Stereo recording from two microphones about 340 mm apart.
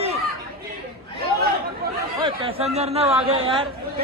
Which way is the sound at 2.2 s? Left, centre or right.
Centre.